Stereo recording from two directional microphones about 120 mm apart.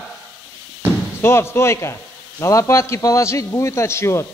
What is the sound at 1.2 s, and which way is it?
A man's voice, 20° left (ahead or behind).